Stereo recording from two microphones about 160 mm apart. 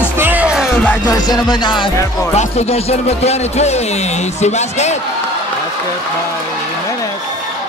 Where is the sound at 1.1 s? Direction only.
25° left (ahead or behind).